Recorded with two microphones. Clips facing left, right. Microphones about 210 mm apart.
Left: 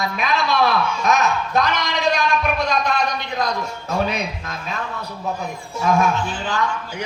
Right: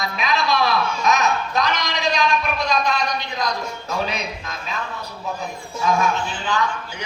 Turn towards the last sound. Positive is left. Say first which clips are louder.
# left 1 dB
turn(degrees=55)  # may be behind; listen again after turning